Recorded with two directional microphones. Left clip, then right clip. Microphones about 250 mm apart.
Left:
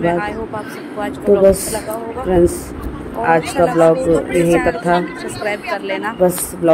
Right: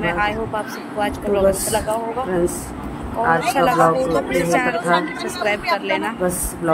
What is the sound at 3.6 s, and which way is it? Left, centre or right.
Speech, centre.